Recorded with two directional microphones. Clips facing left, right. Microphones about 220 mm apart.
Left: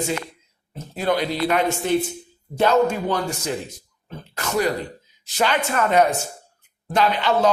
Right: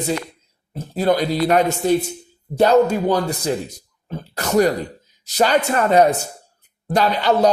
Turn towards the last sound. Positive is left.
turn(degrees=-40)  # may be behind; listen again after turning